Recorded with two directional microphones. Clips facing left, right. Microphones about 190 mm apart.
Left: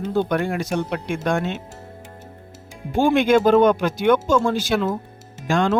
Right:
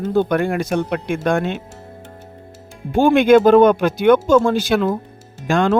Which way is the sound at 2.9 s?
60° right (ahead or behind).